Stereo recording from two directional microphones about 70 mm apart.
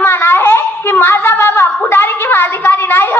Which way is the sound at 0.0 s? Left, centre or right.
Left.